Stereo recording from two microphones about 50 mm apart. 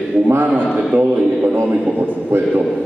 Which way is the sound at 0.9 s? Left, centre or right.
Right.